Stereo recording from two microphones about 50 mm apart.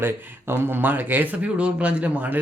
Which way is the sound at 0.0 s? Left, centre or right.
Right.